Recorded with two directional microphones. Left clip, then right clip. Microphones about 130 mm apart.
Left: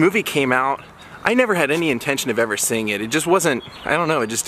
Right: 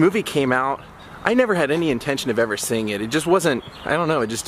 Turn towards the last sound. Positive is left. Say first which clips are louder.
# left 1 dB
turn(degrees=5)  # may be behind; listen again after turning